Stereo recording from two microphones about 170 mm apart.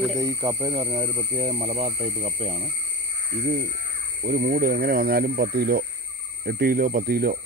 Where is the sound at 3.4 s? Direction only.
55° right (ahead or behind).